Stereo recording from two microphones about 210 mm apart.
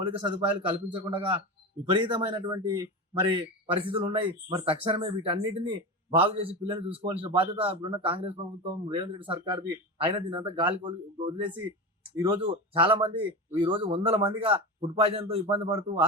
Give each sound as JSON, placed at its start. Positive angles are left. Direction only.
{"t": 0.0, "sound": "speech", "side_deg": -25}